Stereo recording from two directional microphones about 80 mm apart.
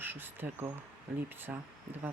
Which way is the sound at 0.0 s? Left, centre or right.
Right.